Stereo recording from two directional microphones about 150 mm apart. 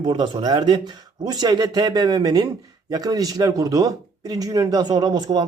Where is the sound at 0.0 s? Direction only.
30° right (ahead or behind).